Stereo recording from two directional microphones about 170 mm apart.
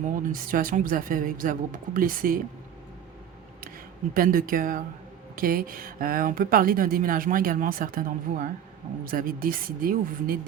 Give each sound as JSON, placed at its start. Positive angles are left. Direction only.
{"t": 0.3, "sound": "a woman's voice", "side_deg": -55}
{"t": 4.1, "sound": "a woman's voice", "side_deg": -55}